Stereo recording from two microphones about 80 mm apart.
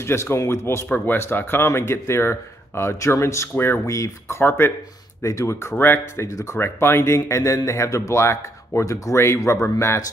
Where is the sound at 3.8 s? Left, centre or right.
Left.